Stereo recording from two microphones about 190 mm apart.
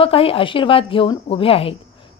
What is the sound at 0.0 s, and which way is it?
A woman's voice, 30° left (ahead or behind).